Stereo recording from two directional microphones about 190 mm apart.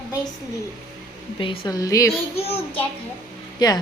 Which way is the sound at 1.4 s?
25° left (ahead or behind).